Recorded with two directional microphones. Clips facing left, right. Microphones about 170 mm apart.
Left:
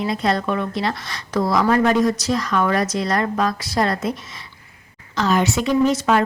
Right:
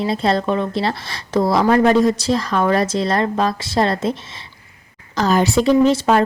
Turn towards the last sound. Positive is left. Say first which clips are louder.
# right 3 dB
turn(degrees=-30)  # may be behind; listen again after turning